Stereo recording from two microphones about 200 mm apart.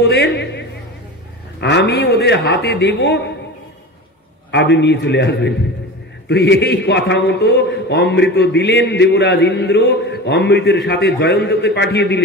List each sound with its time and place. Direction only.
0.0 s a man's voice: 60° left (ahead or behind)
4.5 s a man's voice: 60° left (ahead or behind)